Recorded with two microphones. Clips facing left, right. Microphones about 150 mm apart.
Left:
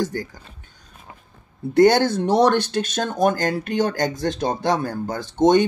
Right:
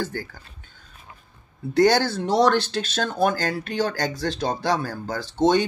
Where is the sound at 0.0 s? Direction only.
15° left (ahead or behind).